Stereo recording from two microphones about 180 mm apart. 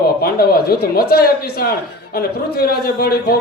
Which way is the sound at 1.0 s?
60° left (ahead or behind).